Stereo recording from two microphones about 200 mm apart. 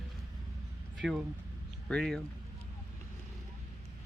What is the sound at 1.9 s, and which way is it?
Speech, centre (ahead or behind).